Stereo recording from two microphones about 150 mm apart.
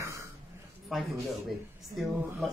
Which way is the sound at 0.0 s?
20° right (ahead or behind).